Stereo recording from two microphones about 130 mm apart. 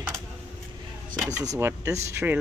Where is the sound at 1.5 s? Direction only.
20° right (ahead or behind).